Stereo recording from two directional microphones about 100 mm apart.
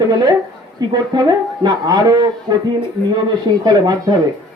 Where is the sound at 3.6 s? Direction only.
45° right (ahead or behind).